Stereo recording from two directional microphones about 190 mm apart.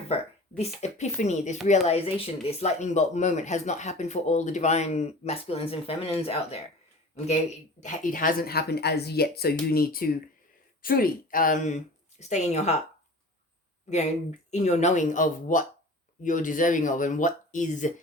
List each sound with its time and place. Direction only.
0.1 s speech: 35° left (ahead or behind)
7.8 s speech: 40° left (ahead or behind)
13.9 s speech: 35° left (ahead or behind)